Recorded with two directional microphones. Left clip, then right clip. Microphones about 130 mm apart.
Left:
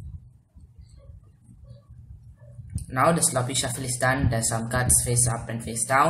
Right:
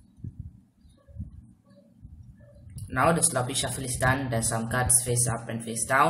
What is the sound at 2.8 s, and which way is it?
Speech, 10° right (ahead or behind).